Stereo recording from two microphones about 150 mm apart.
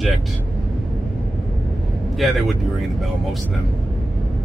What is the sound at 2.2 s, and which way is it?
Speech, centre (ahead or behind).